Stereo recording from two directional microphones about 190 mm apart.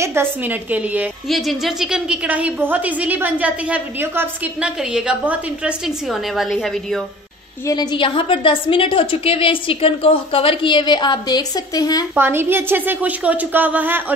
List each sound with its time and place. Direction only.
0.0 s a woman's voice: 10° right (ahead or behind)
7.6 s a woman's voice: 20° left (ahead or behind)
12.2 s a woman's voice: 10° right (ahead or behind)